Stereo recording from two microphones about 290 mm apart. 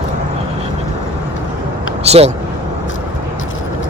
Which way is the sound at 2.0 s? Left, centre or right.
Right.